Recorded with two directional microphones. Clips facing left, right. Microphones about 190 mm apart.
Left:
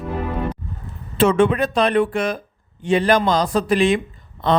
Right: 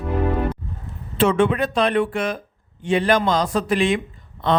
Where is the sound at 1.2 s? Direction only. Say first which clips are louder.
Left 2 dB; 45° left (ahead or behind).